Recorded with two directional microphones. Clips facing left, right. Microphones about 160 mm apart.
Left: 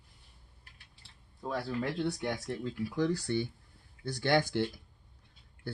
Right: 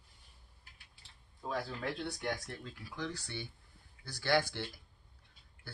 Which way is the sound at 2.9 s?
45° left (ahead or behind).